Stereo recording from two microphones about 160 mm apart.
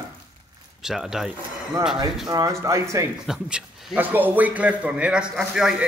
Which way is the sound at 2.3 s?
25° right (ahead or behind).